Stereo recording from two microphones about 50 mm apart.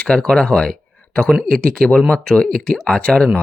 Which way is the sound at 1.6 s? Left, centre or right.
Centre.